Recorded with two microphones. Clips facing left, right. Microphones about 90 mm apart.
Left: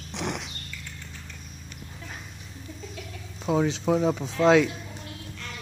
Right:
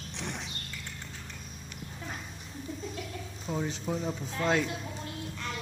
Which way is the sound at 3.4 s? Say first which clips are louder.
Left 10 dB; 90° left.